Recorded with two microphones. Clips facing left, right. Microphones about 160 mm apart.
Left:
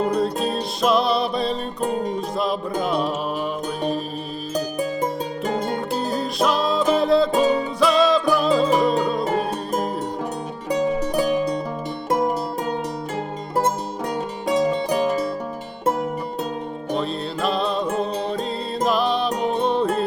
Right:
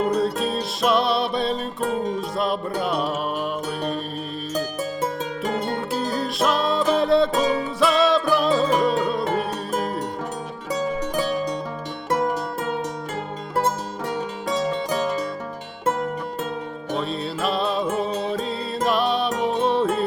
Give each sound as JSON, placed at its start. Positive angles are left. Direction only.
{"t": 0.0, "sound": "music", "side_deg": 0}
{"t": 5.5, "sound": "music", "side_deg": 15}
{"t": 5.9, "sound": "music", "side_deg": 0}
{"t": 11.2, "sound": "music", "side_deg": 15}
{"t": 14.4, "sound": "music", "side_deg": 15}
{"t": 16.9, "sound": "music", "side_deg": 0}